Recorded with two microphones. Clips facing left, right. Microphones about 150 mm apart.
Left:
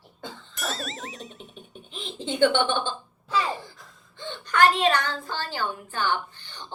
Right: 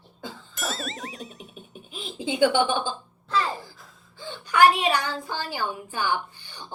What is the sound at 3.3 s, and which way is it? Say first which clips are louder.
A woman's voice: even; 5° left (ahead or behind).